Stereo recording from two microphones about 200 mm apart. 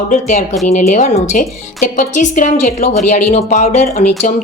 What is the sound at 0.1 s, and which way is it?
A woman's voice, 35° left (ahead or behind).